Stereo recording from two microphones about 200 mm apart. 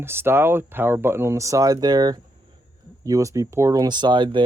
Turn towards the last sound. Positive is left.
turn(degrees=-25)  # may be behind; listen again after turning